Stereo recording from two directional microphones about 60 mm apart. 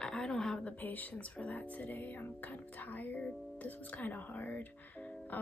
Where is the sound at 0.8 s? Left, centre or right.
Left.